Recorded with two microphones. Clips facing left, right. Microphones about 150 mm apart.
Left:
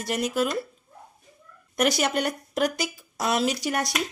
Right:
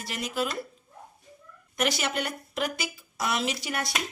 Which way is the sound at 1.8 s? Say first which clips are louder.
Left 5 dB; 40° left (ahead or behind).